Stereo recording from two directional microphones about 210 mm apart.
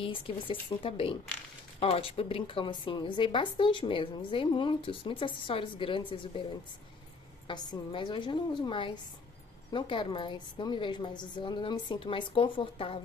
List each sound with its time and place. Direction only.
0.0 s speech: 25° left (ahead or behind)
7.4 s speech: 20° left (ahead or behind)